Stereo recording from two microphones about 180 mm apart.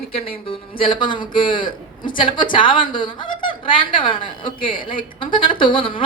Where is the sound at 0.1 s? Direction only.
30° left (ahead or behind).